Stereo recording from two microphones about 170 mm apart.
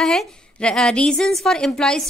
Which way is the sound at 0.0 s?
5° left (ahead or behind).